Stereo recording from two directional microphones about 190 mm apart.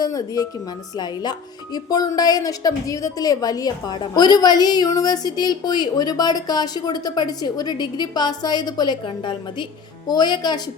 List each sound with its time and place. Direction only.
0.0 s speech: 20° left (ahead or behind)